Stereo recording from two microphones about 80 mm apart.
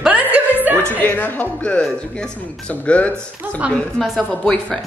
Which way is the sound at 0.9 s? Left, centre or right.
Left.